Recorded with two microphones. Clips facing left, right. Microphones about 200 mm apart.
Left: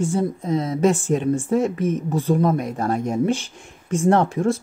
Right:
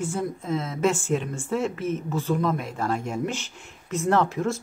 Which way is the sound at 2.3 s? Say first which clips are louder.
Left 6 dB; 45° left (ahead or behind).